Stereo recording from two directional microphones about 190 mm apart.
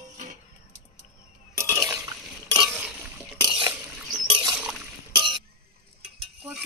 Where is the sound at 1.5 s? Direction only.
15° right (ahead or behind).